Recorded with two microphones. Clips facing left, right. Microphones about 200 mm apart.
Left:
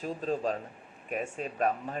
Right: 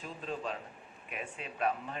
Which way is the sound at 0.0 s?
40° left (ahead or behind).